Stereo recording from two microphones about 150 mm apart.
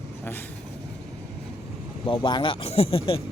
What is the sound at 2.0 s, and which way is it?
Speech, 35° left (ahead or behind).